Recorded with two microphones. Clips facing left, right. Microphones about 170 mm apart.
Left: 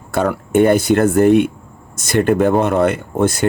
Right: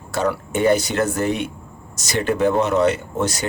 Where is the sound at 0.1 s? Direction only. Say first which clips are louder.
Left 5 dB; 55° left (ahead or behind).